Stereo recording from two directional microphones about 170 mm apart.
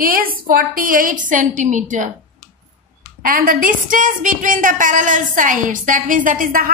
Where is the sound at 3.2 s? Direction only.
55° right (ahead or behind).